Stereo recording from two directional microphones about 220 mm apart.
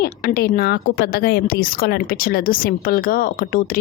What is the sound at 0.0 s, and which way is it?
A woman's voice, 40° left (ahead or behind).